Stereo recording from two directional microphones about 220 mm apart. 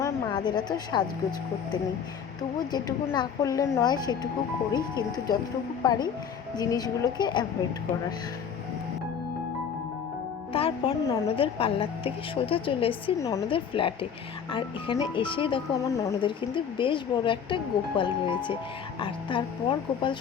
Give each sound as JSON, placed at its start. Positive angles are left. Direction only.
{"t": 0.0, "sound": "a woman's voice", "side_deg": 20}
{"t": 2.7, "sound": "a woman's voice", "side_deg": 20}
{"t": 10.5, "sound": "speech", "side_deg": 25}